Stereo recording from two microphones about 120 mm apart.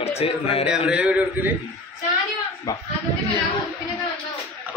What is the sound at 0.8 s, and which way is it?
Speech, 10° right (ahead or behind).